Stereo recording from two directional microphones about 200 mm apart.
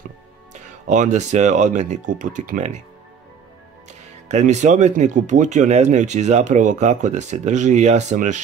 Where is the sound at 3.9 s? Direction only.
35° right (ahead or behind).